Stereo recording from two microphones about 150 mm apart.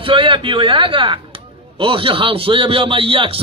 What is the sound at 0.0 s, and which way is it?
A man's voice, 35° right (ahead or behind).